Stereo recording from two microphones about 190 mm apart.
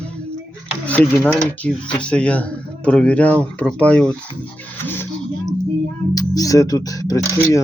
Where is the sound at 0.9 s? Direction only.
10° left (ahead or behind).